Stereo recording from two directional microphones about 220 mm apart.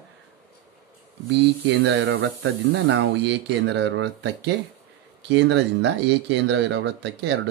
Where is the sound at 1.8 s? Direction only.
60° right (ahead or behind).